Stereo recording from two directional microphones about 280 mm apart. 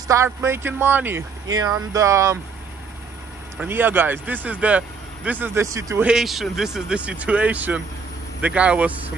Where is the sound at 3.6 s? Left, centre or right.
Centre.